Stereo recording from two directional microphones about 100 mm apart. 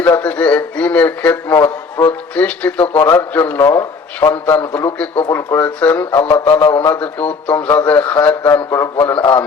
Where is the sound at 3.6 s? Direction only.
30° left (ahead or behind).